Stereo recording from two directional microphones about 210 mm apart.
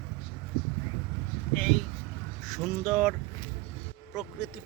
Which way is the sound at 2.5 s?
Centre (ahead or behind).